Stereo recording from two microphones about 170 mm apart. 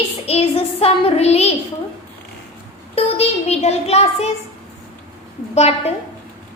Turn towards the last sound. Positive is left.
turn(degrees=40)  # may be behind; listen again after turning